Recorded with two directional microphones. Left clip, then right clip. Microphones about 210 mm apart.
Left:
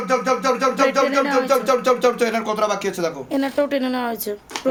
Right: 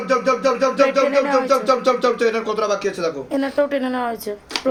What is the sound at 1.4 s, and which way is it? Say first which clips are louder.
Speech: right 1 dB; 50° left (ahead or behind).